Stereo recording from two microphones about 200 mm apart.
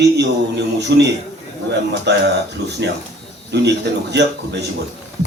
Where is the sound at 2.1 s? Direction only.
60° right (ahead or behind).